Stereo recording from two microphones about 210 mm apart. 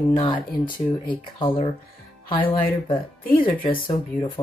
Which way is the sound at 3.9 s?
20° left (ahead or behind).